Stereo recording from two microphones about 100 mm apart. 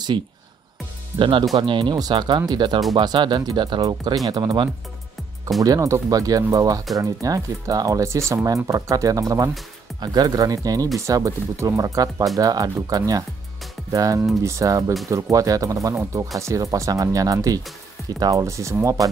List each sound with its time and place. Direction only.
1.1 s speech: 60° right (ahead or behind)
5.6 s speech: 35° right (ahead or behind)